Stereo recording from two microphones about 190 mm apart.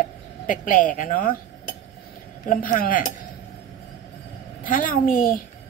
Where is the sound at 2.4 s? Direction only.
45° left (ahead or behind).